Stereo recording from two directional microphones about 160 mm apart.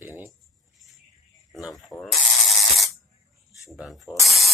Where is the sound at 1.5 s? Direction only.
Centre (ahead or behind).